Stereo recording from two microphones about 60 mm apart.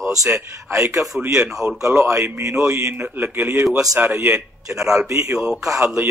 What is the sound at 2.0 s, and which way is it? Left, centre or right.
Speech, right.